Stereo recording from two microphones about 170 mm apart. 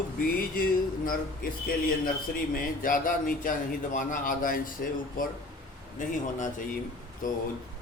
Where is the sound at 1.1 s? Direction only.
60° left (ahead or behind).